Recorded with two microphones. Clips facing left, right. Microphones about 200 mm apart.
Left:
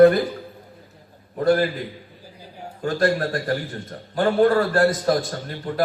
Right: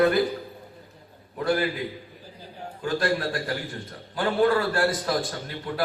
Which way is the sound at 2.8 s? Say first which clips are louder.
Left 4 dB; 40° left (ahead or behind).